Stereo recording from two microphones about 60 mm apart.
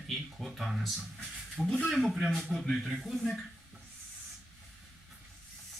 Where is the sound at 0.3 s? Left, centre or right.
Centre.